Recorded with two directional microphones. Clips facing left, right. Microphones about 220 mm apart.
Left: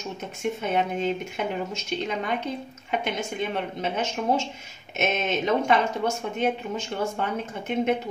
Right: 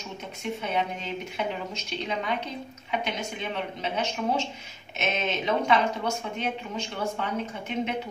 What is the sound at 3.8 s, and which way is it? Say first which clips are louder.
Speech: left 1 dB; 50° left (ahead or behind).